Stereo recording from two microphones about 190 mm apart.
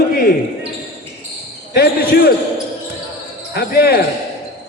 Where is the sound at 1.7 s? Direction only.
55° left (ahead or behind).